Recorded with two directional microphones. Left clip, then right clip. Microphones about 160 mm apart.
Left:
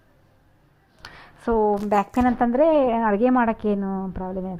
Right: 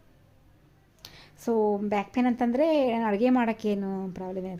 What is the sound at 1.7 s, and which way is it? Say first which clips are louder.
Speech: left 7 dB; 15° left (ahead or behind).